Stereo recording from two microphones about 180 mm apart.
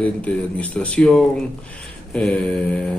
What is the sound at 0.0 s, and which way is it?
A man's voice, 5° left (ahead or behind).